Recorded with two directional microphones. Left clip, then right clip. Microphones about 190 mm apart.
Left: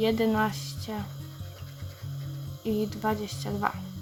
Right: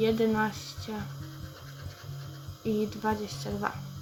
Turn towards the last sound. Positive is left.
turn(degrees=25)  # may be behind; listen again after turning